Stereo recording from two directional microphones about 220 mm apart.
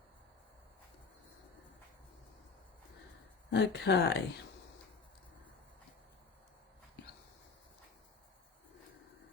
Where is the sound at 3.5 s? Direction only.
50° left (ahead or behind).